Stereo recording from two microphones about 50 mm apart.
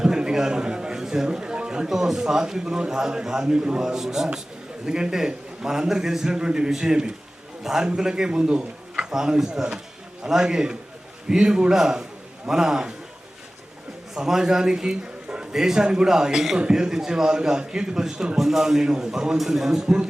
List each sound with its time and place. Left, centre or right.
0.0 s a man's voice: centre
14.2 s a man's voice: centre